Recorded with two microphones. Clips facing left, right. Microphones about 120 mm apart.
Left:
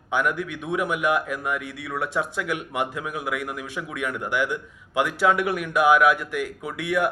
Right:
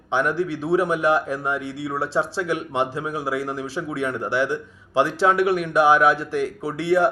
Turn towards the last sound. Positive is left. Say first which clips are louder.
# right 5 dB
turn(degrees=-30)  # may be behind; listen again after turning